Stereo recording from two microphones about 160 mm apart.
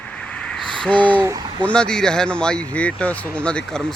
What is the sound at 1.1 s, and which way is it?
Speech, 15° right (ahead or behind).